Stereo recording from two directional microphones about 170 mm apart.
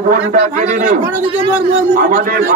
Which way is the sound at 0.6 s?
50° right (ahead or behind).